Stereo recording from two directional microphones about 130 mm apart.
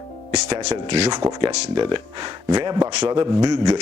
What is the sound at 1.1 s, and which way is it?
Speech, 35° right (ahead or behind).